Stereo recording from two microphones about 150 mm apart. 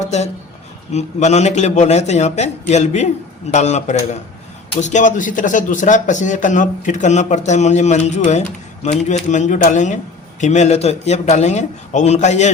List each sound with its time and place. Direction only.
0.9 s a man's voice: 50° left (ahead or behind)